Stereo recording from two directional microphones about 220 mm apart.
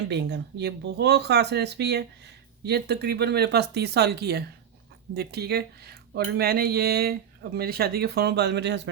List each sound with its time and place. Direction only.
0.1 s speech: 50° right (ahead or behind)